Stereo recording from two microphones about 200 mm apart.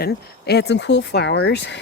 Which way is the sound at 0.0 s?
55° left (ahead or behind).